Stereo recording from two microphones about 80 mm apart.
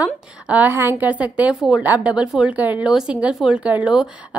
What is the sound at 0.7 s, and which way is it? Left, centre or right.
Speech, right.